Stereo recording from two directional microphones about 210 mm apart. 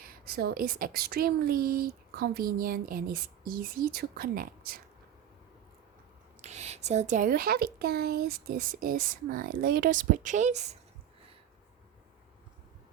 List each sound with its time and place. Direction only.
0.0 s a woman's voice: 45° right (ahead or behind)
6.4 s speech: 30° right (ahead or behind)